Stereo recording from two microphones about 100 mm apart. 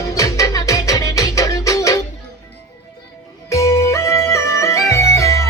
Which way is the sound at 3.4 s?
30° left (ahead or behind).